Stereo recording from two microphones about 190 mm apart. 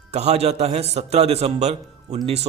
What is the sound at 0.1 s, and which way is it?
A man's voice, 35° right (ahead or behind).